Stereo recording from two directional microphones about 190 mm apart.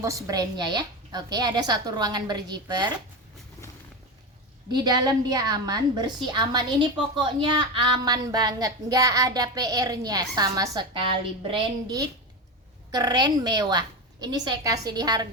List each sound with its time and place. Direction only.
0.0 s a woman's voice: 15° right (ahead or behind)
4.7 s a woman's voice: 20° right (ahead or behind)
12.9 s a woman's voice: 20° right (ahead or behind)